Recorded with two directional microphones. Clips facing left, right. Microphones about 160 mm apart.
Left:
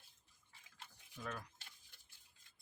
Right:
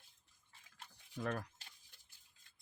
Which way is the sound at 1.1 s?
50° right (ahead or behind).